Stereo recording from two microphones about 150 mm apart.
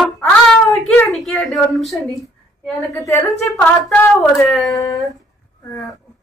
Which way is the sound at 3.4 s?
5° left (ahead or behind).